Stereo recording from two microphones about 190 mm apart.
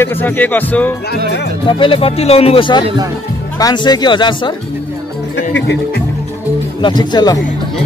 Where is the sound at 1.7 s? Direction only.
30° left (ahead or behind).